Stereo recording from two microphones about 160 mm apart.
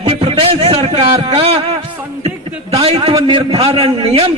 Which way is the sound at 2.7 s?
35° right (ahead or behind).